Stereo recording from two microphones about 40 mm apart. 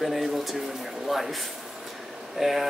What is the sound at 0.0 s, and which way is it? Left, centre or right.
Speech, centre.